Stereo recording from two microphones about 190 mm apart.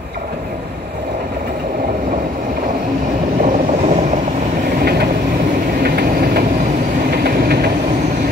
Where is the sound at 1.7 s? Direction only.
45° right (ahead or behind).